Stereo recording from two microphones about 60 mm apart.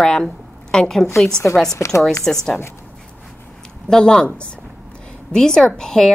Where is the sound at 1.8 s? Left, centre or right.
Left.